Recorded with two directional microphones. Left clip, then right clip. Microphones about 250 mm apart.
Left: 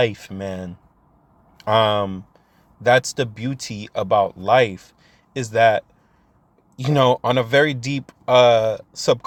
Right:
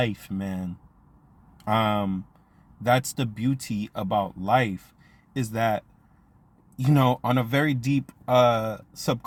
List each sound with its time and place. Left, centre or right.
0.0 s speech: centre